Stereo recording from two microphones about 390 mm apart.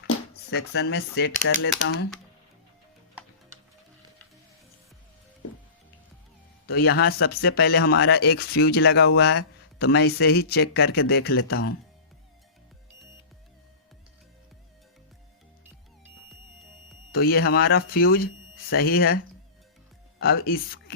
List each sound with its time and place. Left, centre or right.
0.1 s speech: left
6.7 s speech: left
17.1 s speech: left